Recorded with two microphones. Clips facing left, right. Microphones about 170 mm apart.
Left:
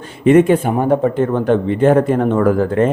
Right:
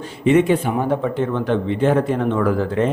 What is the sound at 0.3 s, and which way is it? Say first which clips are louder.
Speech: left 5 dB; 50° left (ahead or behind).